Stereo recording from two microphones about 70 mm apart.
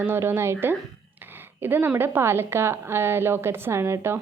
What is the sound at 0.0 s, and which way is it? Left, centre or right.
A woman's voice, right.